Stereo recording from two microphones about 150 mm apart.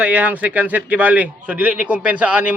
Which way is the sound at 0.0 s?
10° right (ahead or behind).